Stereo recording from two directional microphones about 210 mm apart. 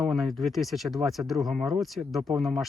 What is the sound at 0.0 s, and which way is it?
Speech, centre (ahead or behind).